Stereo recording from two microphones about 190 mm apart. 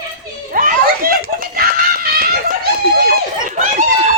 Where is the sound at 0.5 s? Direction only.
45° right (ahead or behind).